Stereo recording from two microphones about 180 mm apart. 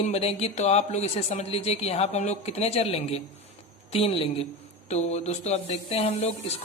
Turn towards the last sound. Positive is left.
turn(degrees=35)  # may be behind; listen again after turning